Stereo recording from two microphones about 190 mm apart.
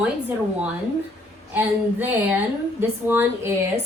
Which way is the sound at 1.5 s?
10° right (ahead or behind).